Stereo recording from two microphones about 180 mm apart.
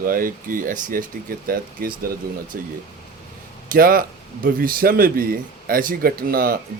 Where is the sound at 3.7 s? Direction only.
55° right (ahead or behind).